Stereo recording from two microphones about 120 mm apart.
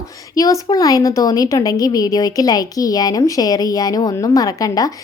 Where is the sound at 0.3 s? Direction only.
30° left (ahead or behind).